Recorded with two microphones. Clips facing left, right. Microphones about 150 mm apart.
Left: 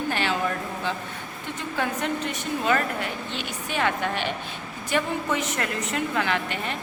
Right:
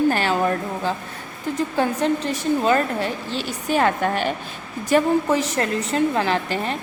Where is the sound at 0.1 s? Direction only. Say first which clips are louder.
Right 6 dB; 40° right (ahead or behind).